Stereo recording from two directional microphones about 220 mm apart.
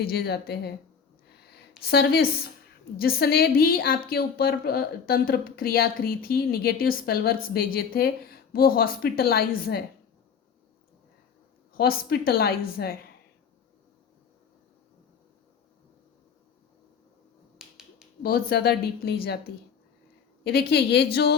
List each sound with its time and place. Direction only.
0.0 s a woman's voice: 45° left (ahead or behind)
1.9 s a woman's voice: 45° left (ahead or behind)
11.7 s a woman's voice: 40° left (ahead or behind)
17.6 s finger snapping: 5° right (ahead or behind)
18.2 s a woman's voice: 45° left (ahead or behind)
20.4 s a woman's voice: 45° left (ahead or behind)